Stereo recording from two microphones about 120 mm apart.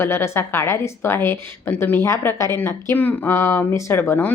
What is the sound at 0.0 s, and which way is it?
A woman's voice, 20° left (ahead or behind).